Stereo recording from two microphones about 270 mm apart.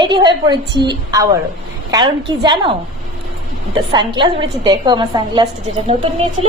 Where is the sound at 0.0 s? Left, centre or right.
Centre.